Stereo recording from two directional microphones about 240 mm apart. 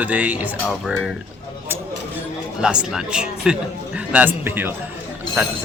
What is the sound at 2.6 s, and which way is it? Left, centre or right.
Speech, centre.